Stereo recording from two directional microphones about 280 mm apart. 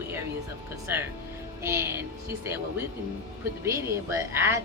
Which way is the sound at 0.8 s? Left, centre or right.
Centre.